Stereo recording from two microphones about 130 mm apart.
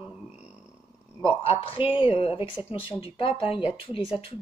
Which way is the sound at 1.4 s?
50° left (ahead or behind).